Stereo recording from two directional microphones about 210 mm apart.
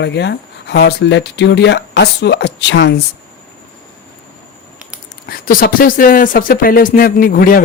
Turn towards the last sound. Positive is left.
turn(degrees=40)  # may be behind; listen again after turning